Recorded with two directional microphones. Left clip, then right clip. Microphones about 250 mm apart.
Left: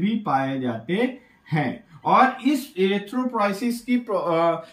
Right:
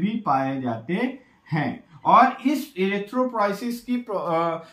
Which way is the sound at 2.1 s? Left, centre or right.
Centre.